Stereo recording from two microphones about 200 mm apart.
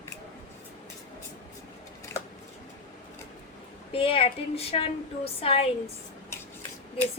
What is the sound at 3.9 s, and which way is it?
A woman's voice, 25° left (ahead or behind).